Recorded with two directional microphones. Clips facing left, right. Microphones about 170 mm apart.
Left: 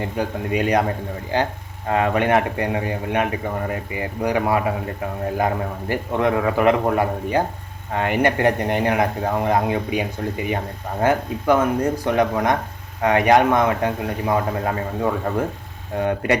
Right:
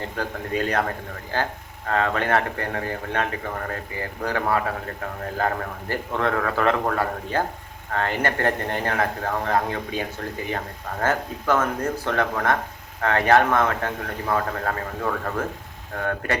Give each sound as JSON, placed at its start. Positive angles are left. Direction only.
{"t": 0.0, "sound": "a man's voice", "side_deg": 15}
{"t": 5.9, "sound": "a man's voice", "side_deg": 15}